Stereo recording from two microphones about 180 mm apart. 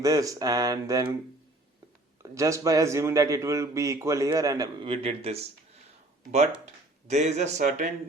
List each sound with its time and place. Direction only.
0.0 s a sound: 20° right (ahead or behind)
2.3 s a man's voice: 15° right (ahead or behind); by 5.5 s 35° right (ahead or behind)
7.1 s speech: 40° right (ahead or behind)